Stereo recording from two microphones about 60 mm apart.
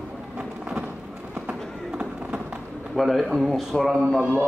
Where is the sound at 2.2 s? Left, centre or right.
Right.